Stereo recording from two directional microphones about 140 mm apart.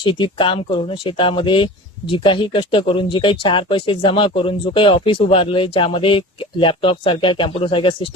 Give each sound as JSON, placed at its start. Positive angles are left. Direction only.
{"t": 0.0, "sound": "speech", "side_deg": 35}